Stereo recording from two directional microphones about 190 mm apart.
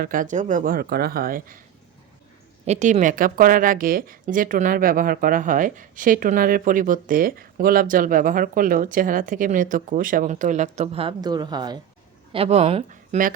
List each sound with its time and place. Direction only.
0.0 s a woman's voice: 45° right (ahead or behind)
2.6 s a woman's voice: 35° right (ahead or behind); by 11.8 s 20° right (ahead or behind)
12.3 s speech: 30° right (ahead or behind)